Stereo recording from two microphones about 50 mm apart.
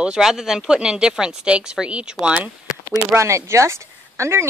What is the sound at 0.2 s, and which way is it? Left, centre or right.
Speech, centre.